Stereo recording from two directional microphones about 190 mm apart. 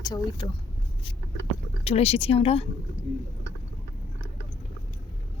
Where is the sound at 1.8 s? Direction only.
35° left (ahead or behind).